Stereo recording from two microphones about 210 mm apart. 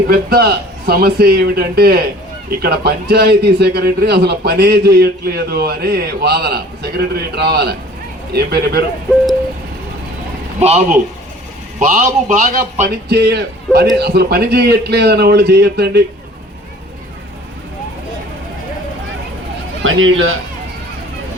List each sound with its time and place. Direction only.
0.1 s a man's voice: 50° right (ahead or behind)
10.6 s a man's voice: 35° right (ahead or behind)
13.1 s a man's voice: 50° right (ahead or behind)
19.8 s speech: 70° right (ahead or behind)